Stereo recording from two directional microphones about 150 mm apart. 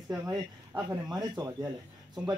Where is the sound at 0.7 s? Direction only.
15° right (ahead or behind).